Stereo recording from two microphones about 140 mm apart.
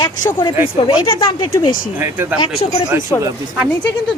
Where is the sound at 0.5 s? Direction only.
15° right (ahead or behind).